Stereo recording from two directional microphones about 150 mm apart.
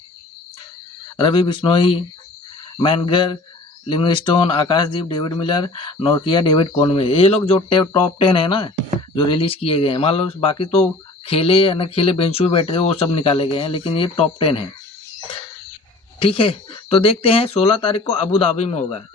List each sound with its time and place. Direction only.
1.1 s speech: 35° left (ahead or behind)
16.2 s a man's voice: 35° left (ahead or behind)